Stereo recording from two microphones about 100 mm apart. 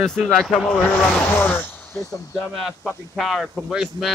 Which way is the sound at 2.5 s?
Centre (ahead or behind).